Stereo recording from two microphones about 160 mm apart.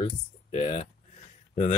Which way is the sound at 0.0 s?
40° left (ahead or behind).